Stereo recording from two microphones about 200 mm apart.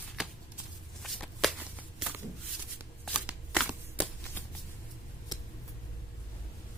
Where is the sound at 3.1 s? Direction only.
5° right (ahead or behind).